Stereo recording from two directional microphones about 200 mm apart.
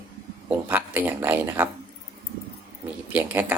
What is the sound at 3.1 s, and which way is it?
Speech, 10° right (ahead or behind).